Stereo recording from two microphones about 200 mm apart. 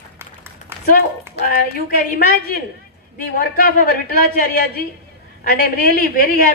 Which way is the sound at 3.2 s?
45° left (ahead or behind).